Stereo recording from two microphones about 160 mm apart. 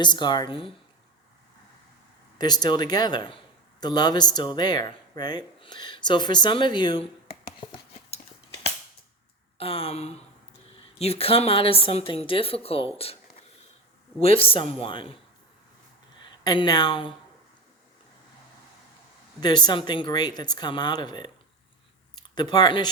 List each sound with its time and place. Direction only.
0.0 s speech: 30° left (ahead or behind)
2.4 s speech: 25° left (ahead or behind)
7.6 s a sound: 30° left (ahead or behind)
9.6 s a woman's voice: 35° left (ahead or behind)
16.2 s speech: 30° left (ahead or behind)
19.4 s speech: 25° left (ahead or behind)